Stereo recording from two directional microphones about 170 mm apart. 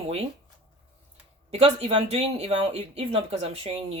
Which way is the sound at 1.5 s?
35° right (ahead or behind).